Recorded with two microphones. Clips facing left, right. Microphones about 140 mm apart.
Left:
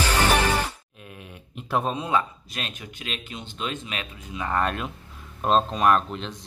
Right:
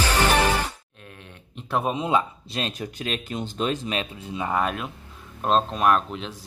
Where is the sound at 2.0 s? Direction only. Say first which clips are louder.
Right 2 dB; 20° right (ahead or behind).